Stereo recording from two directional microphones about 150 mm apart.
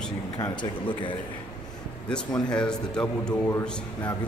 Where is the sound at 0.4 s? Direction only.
30° left (ahead or behind).